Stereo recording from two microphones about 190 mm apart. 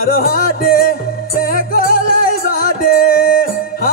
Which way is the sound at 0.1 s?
50° left (ahead or behind).